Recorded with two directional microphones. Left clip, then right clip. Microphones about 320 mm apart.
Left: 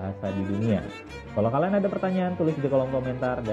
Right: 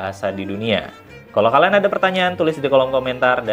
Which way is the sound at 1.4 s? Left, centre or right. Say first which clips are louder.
Right 11 dB; centre.